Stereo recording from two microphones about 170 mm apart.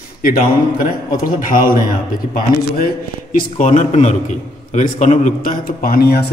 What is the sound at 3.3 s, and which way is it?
A man's voice, 45° left (ahead or behind).